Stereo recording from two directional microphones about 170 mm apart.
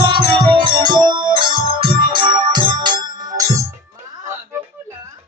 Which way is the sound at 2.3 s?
25° right (ahead or behind).